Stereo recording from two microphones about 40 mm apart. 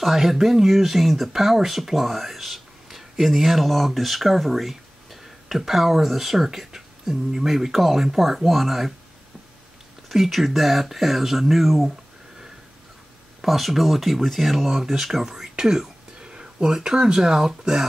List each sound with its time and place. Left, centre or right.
0.0 s speech: centre
10.0 s speech: centre
13.4 s speech: centre